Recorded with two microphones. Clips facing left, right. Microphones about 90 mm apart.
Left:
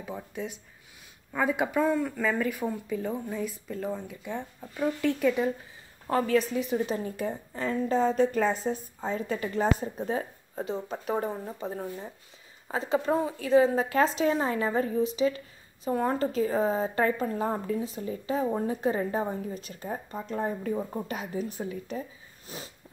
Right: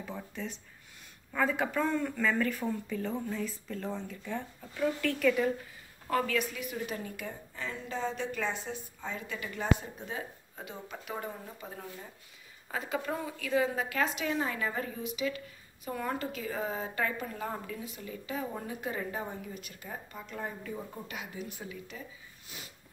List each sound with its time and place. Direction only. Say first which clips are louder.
0.0 s a woman's voice: left 4 dB; 15° left (ahead or behind); by 22.6 s 35° left (ahead or behind)